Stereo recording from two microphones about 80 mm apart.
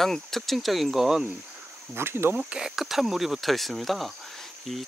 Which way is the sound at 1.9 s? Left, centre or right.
Right.